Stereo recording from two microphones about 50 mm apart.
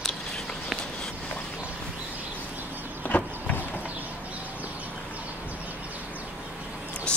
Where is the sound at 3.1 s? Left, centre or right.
Left.